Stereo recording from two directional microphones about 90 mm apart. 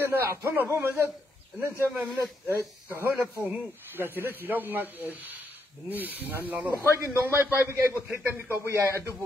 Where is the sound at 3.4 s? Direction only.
20° right (ahead or behind).